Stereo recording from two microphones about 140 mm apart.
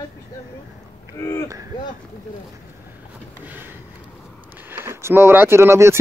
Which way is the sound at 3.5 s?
15° right (ahead or behind).